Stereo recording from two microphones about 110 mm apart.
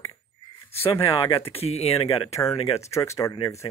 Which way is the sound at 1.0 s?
50° left (ahead or behind).